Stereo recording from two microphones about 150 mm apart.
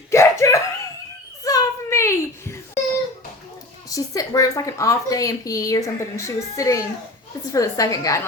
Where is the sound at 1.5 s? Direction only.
20° left (ahead or behind).